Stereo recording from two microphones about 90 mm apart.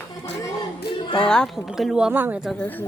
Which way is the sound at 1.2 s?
10° left (ahead or behind).